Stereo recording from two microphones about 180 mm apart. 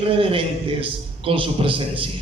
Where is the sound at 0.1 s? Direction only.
30° right (ahead or behind).